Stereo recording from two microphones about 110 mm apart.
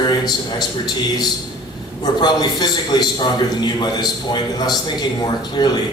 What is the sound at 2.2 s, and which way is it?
A man's voice, 40° left (ahead or behind).